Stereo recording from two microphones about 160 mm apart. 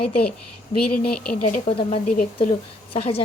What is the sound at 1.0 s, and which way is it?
Speech, 60° left (ahead or behind).